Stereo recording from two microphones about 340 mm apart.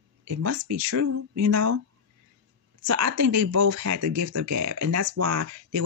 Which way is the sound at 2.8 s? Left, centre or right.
Right.